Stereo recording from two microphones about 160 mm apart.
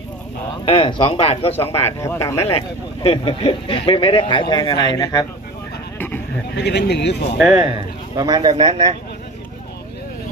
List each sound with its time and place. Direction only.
0.7 s speech: 30° left (ahead or behind)
2.0 s speech: 20° left (ahead or behind)
2.4 s speech: 35° left (ahead or behind)
5.9 s a sound: 10° left (ahead or behind)
6.5 s speech: 90° left
8.2 s speech: 25° right (ahead or behind)